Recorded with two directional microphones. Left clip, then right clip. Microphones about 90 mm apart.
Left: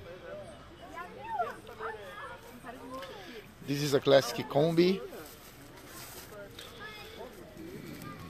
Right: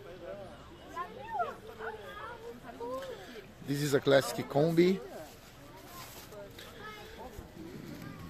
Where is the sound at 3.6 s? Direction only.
25° right (ahead or behind).